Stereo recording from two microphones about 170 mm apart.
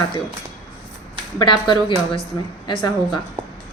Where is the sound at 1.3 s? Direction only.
30° left (ahead or behind).